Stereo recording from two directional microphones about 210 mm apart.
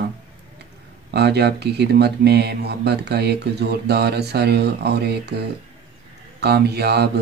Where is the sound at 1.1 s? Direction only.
50° right (ahead or behind).